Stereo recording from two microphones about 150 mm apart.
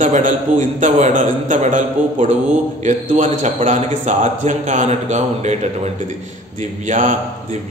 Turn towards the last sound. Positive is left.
turn(degrees=-55)  # may be behind; listen again after turning